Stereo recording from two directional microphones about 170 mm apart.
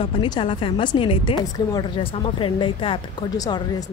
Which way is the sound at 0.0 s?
30° left (ahead or behind).